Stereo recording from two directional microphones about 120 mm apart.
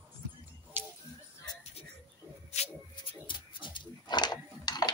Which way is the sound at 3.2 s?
40° left (ahead or behind).